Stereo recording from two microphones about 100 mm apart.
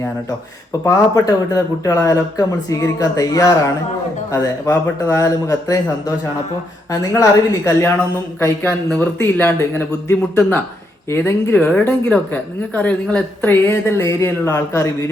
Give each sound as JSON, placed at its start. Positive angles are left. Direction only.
{"t": 0.9, "sound": "speech", "side_deg": 35}